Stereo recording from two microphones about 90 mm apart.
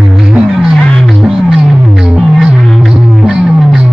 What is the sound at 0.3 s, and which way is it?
Music, 5° right (ahead or behind).